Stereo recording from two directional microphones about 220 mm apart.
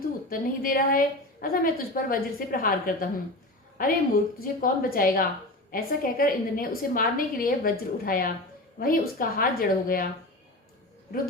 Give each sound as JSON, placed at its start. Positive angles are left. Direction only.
{"t": 0.3, "sound": "a woman's voice", "side_deg": 40}